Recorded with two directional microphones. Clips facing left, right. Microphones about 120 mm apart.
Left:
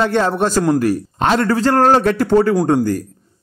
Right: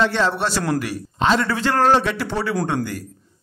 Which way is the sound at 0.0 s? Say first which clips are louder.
Left 4 dB; 45° left (ahead or behind).